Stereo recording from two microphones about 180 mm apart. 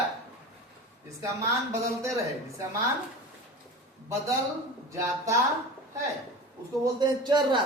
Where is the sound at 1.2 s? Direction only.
15° right (ahead or behind).